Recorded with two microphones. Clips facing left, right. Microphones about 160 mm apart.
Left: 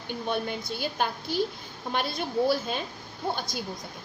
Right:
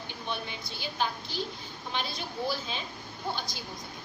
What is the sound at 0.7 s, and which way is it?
A woman's voice, 50° left (ahead or behind).